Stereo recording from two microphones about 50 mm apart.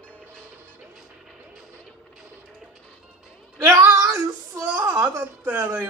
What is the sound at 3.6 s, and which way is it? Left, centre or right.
Female singing, right.